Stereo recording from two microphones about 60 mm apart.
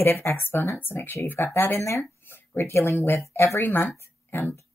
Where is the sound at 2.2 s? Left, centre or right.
Left.